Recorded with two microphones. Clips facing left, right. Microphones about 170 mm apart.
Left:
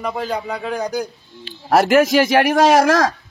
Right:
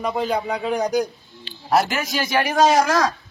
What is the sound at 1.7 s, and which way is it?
A man's voice, 60° left (ahead or behind).